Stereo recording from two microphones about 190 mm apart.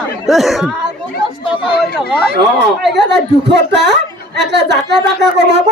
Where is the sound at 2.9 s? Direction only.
65° right (ahead or behind).